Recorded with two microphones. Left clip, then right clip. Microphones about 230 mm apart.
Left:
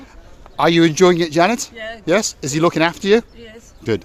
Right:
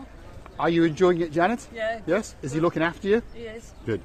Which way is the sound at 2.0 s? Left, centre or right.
Left.